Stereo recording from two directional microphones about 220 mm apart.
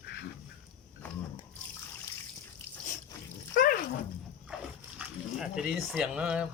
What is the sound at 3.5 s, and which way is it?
Dog, 40° left (ahead or behind).